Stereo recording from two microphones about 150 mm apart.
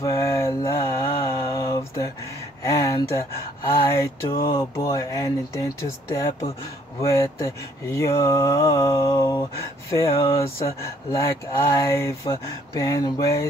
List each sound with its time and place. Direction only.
0.0 s mantra: 20° left (ahead or behind)
2.6 s a sound: 20° left (ahead or behind)
3.6 s speech: 15° left (ahead or behind)
4.6 s mantra: 20° left (ahead or behind)